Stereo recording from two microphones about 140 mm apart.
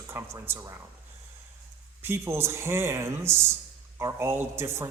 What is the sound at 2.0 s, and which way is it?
A man's voice, 15° right (ahead or behind).